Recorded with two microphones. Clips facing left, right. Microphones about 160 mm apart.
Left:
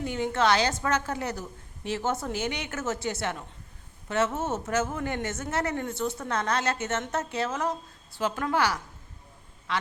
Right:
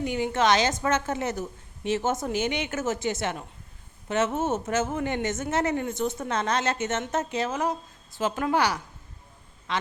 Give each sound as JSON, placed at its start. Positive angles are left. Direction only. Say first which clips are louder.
{"t": 0.0, "sound": "a woman's voice", "louder": "right 1 dB", "side_deg": -15}